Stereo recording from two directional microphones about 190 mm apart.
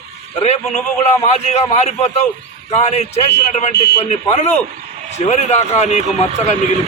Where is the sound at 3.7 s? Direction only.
60° left (ahead or behind).